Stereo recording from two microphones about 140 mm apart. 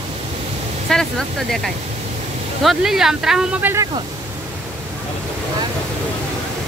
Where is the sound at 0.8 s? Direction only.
5° left (ahead or behind); by 3.8 s 15° right (ahead or behind).